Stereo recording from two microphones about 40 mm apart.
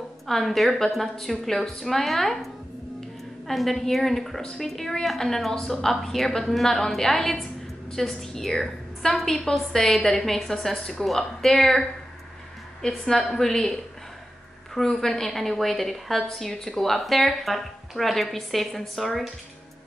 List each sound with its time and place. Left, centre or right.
0.3 s a woman's voice: centre
3.4 s a woman's voice: centre
12.8 s a woman's voice: centre